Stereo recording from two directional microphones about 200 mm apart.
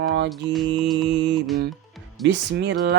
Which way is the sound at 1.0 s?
60° right (ahead or behind).